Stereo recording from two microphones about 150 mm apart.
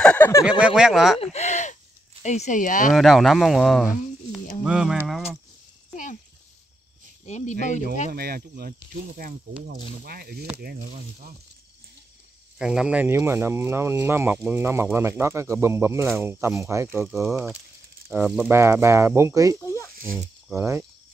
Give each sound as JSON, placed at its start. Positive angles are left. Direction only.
{"t": 0.0, "sound": "a sound", "side_deg": 10}
{"t": 0.5, "sound": "speech", "side_deg": -5}
{"t": 1.2, "sound": "a sound", "side_deg": 45}
{"t": 2.2, "sound": "speech", "side_deg": 50}
{"t": 2.9, "sound": "speech", "side_deg": 0}
{"t": 7.2, "sound": "speech", "side_deg": 50}
{"t": 8.1, "sound": "speech", "side_deg": -90}
{"t": 10.0, "sound": "speech", "side_deg": -85}
{"t": 12.5, "sound": "speech", "side_deg": -5}
{"t": 17.0, "sound": "speech", "side_deg": 0}
{"t": 19.6, "sound": "a sound", "side_deg": 20}
{"t": 20.5, "sound": "speech", "side_deg": -20}